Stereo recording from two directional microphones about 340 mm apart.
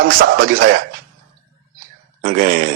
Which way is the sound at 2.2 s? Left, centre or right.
Right.